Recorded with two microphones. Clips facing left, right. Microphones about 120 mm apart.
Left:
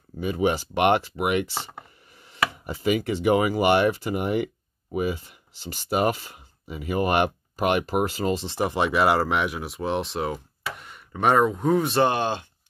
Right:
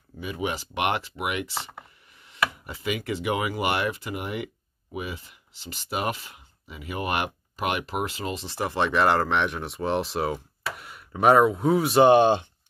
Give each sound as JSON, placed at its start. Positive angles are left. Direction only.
{"t": 0.2, "sound": "speech", "side_deg": 40}
{"t": 8.5, "sound": "speech", "side_deg": 15}